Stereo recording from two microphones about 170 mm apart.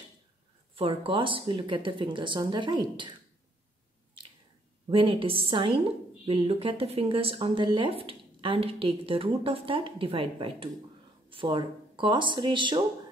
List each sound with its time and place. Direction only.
0.7 s speech: 30° right (ahead or behind)
4.8 s a woman's voice: 30° right (ahead or behind)